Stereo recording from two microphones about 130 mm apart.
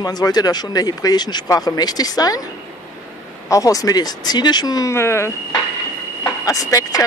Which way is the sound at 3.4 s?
25° left (ahead or behind).